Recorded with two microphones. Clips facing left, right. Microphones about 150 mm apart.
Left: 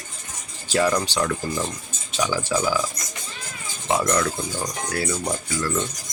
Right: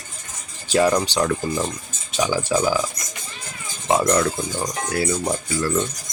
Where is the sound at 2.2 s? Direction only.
20° right (ahead or behind).